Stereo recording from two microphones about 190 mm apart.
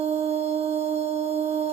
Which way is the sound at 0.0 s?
35° right (ahead or behind).